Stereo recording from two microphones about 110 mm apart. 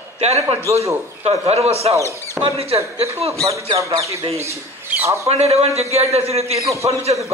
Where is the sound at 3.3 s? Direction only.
30° right (ahead or behind).